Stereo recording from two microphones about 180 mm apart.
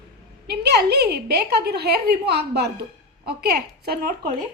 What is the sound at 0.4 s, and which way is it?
A woman's voice, 65° right (ahead or behind).